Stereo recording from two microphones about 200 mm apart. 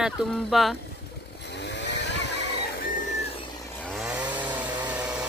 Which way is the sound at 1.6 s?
60° left (ahead or behind).